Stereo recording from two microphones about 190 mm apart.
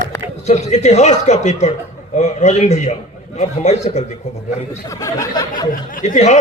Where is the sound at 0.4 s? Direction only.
35° left (ahead or behind).